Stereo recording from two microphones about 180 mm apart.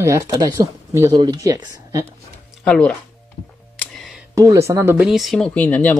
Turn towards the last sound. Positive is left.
turn(degrees=10)  # may be behind; listen again after turning